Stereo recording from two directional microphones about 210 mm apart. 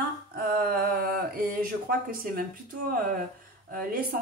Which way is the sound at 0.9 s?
45° right (ahead or behind).